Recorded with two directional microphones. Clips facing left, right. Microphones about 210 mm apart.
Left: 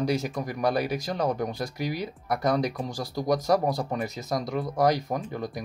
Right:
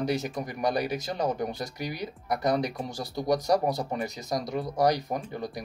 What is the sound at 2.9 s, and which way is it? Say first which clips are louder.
Speech: left 2 dB; 20° right (ahead or behind).